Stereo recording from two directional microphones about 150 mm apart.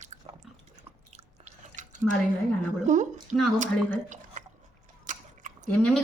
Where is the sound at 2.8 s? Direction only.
55° right (ahead or behind).